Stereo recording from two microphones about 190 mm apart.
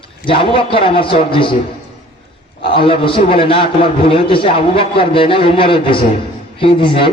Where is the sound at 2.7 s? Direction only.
30° left (ahead or behind).